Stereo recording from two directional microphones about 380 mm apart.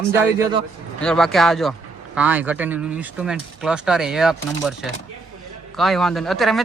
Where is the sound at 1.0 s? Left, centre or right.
Centre.